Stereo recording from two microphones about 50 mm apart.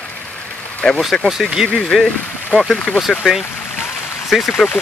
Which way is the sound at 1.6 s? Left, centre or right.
Centre.